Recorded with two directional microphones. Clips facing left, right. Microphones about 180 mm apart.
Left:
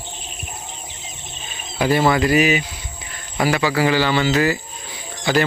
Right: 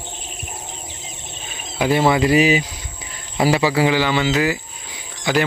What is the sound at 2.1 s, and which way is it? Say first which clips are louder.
Speech: right 3 dB; 20° right (ahead or behind).